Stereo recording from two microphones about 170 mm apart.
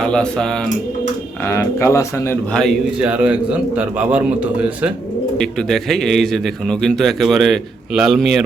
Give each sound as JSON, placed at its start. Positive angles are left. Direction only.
{"t": 0.0, "sound": "a man's voice", "side_deg": 5}
{"t": 1.5, "sound": "speech", "side_deg": 15}
{"t": 2.5, "sound": "a man's voice", "side_deg": 5}
{"t": 3.0, "sound": "a man's voice", "side_deg": -5}
{"t": 5.4, "sound": "a man's voice", "side_deg": 5}